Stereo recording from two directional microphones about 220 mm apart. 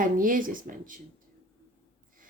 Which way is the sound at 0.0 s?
40° right (ahead or behind).